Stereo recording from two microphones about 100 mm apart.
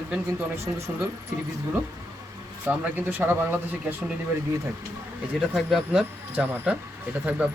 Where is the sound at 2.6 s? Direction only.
15° right (ahead or behind).